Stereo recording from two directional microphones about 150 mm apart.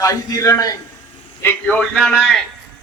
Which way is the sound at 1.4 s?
10° left (ahead or behind).